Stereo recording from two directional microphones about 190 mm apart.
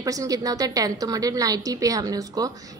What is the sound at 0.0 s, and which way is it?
A woman's voice, 20° right (ahead or behind).